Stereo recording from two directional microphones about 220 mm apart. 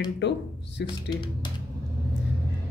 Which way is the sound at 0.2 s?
55° left (ahead or behind).